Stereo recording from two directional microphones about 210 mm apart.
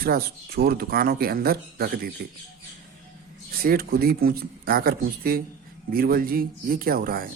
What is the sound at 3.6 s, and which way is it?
A man's voice, 45° right (ahead or behind).